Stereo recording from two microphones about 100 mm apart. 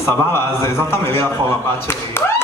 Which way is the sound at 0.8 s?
25° left (ahead or behind).